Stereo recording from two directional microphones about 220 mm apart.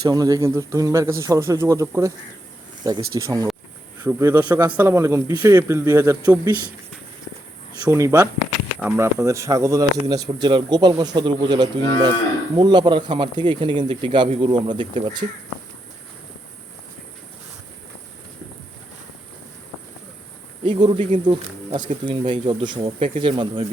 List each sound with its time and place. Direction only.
0.0 s speech: 15° right (ahead or behind)
7.9 s speech: 15° right (ahead or behind)
20.7 s speech: 20° right (ahead or behind)